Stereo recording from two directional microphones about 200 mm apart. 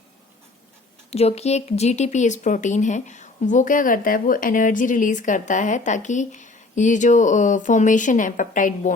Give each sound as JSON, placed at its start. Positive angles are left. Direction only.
{"t": 1.1, "sound": "speech", "side_deg": 30}